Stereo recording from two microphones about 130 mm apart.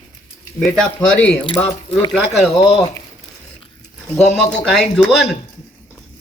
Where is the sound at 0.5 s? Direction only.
5° left (ahead or behind).